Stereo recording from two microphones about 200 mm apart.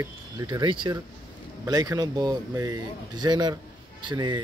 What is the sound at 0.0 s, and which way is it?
Speech, 20° right (ahead or behind).